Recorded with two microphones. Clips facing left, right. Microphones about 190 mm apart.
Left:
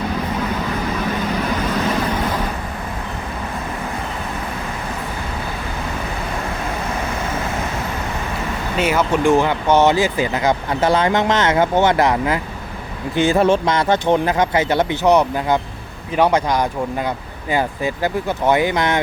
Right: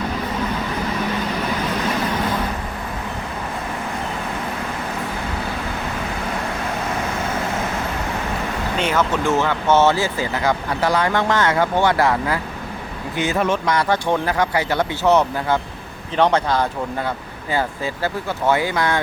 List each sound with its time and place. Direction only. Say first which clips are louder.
8.8 s speech: left 4 dB; 10° left (ahead or behind)
13.1 s speech: left 6 dB; 30° left (ahead or behind)